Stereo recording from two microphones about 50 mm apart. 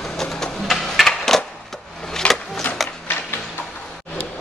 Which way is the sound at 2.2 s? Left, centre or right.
Left.